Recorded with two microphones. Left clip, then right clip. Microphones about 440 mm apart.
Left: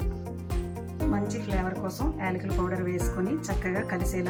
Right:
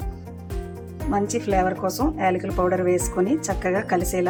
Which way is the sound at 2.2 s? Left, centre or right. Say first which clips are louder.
Right 10 dB; centre.